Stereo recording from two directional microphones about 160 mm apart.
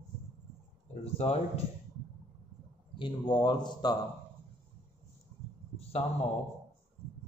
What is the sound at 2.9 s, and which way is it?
Speech, 30° left (ahead or behind).